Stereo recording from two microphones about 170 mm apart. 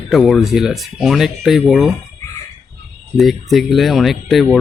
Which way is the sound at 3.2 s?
Centre (ahead or behind).